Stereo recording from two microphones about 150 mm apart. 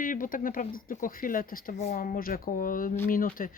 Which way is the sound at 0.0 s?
65° left (ahead or behind).